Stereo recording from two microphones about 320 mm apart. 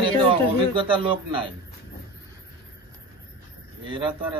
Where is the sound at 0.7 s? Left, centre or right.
Centre.